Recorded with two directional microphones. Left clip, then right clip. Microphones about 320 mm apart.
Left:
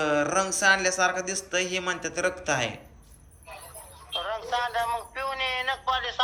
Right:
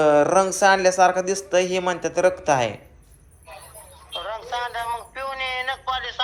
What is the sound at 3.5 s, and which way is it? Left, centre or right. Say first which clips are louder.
Music: right 2 dB; centre.